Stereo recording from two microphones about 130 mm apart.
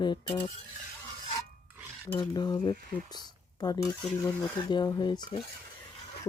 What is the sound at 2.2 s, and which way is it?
Speech, 35° left (ahead or behind).